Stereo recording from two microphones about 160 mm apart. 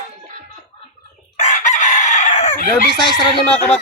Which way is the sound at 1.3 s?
50° left (ahead or behind).